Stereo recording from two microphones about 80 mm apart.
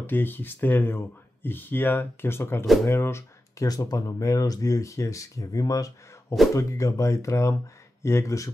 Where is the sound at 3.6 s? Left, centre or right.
Left.